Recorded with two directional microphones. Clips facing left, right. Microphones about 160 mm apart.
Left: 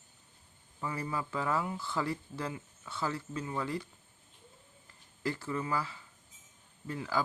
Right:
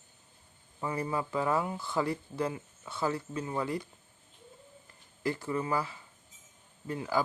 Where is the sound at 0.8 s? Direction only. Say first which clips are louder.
Right 4 dB; 25° right (ahead or behind).